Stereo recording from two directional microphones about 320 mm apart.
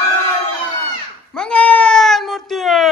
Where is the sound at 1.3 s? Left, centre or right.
Centre.